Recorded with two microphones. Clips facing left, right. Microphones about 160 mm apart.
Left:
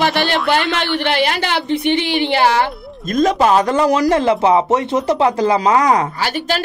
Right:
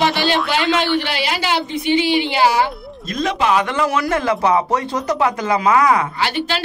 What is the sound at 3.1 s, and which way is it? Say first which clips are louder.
Speech: left 5 dB; 45° left (ahead or behind).